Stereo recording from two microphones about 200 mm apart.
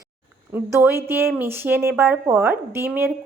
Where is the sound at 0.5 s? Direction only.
10° right (ahead or behind).